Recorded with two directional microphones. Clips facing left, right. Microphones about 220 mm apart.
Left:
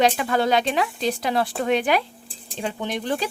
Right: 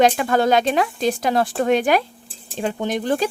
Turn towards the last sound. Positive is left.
turn(degrees=-45)  # may be behind; listen again after turning